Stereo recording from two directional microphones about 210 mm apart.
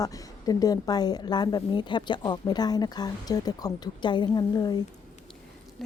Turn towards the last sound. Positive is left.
turn(degrees=20)  # may be behind; listen again after turning